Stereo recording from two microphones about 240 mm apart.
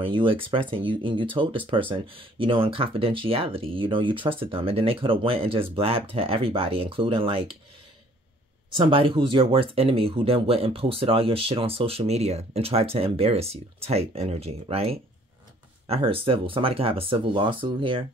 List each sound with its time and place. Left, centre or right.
0.0 s speech: right
8.7 s speech: right